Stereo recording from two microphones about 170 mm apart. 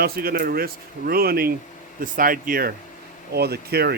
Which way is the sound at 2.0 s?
55° right (ahead or behind).